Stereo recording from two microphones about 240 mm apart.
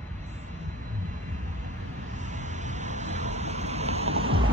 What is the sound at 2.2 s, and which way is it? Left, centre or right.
Vehicle, right.